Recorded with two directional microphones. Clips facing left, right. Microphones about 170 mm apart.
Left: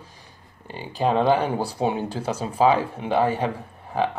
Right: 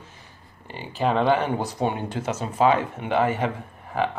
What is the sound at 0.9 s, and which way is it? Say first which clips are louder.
Speech: left 1 dB; 10° left (ahead or behind).